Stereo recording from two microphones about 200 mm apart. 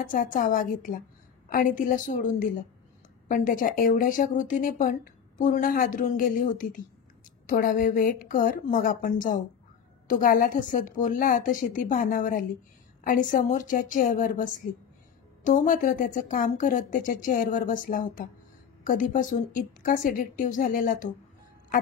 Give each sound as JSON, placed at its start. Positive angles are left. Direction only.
{"t": 0.0, "sound": "speech", "side_deg": 40}